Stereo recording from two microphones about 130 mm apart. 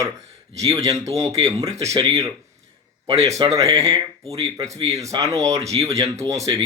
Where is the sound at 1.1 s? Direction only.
25° right (ahead or behind).